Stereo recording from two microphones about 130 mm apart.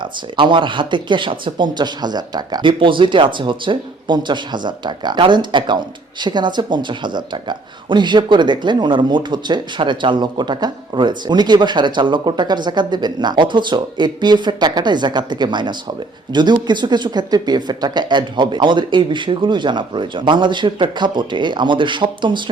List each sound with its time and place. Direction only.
0.3 s speech: 40° right (ahead or behind)